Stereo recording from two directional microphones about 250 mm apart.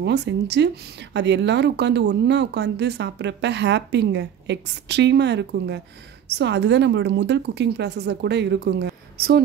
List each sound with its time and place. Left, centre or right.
0.0 s speech: right